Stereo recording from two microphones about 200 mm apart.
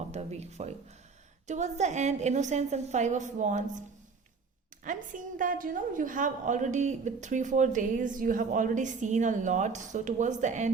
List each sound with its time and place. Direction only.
0.1 s a woman's voice: 35° right (ahead or behind)
4.8 s a woman's voice: 40° right (ahead or behind)